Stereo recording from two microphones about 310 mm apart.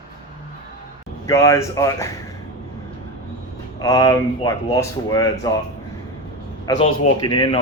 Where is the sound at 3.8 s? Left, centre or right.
Centre.